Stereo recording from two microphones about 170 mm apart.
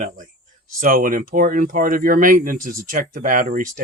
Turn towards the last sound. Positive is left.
turn(degrees=-50)  # may be behind; listen again after turning